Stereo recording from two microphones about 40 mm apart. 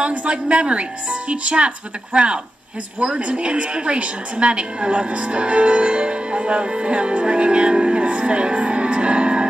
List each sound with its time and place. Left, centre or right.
0.0 s a woman's voice: right